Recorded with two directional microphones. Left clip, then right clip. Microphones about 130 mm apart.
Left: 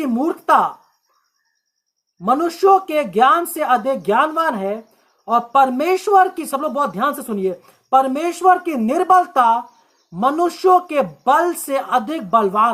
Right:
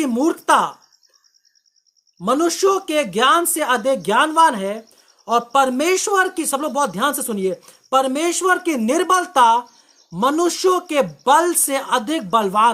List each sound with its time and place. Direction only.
0.0 s speech: 35° right (ahead or behind)
2.7 s speech: 25° right (ahead or behind)
8.6 s speech: 35° right (ahead or behind)